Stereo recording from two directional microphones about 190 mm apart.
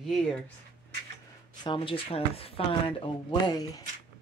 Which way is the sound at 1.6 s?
25° left (ahead or behind).